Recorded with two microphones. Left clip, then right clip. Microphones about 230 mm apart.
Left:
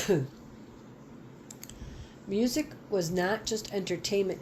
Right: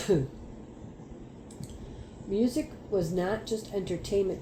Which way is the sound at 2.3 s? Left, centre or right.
Left.